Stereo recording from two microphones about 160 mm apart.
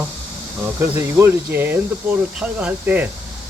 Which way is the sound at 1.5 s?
10° right (ahead or behind).